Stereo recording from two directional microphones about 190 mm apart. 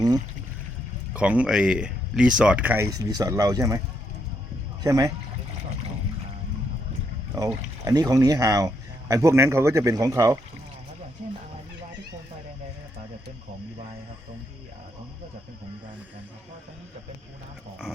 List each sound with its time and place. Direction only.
1.1 s speech: 5° right (ahead or behind)
4.8 s speech: 20° right (ahead or behind)
7.3 s speech: 20° right (ahead or behind)